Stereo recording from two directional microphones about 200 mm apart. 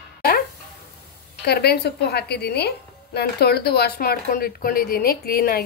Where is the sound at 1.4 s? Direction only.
55° left (ahead or behind).